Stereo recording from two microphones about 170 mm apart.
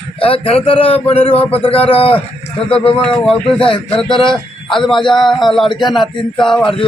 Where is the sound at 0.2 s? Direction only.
30° left (ahead or behind).